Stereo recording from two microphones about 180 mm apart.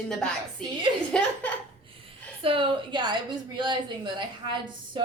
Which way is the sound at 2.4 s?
30° right (ahead or behind).